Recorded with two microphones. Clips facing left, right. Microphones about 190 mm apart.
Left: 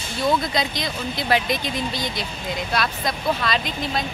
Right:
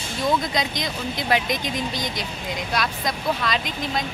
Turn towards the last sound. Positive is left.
turn(degrees=-10)  # may be behind; listen again after turning